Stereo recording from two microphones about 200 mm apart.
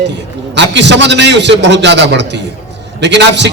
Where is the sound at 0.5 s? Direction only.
60° right (ahead or behind).